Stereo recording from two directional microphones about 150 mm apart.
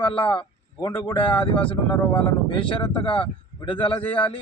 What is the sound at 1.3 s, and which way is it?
A man's voice, 35° left (ahead or behind).